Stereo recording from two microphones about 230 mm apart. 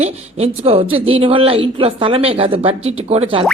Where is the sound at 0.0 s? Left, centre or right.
Right.